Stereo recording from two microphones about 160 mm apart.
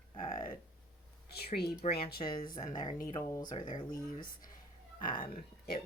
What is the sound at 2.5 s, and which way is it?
Speech, 55° left (ahead or behind).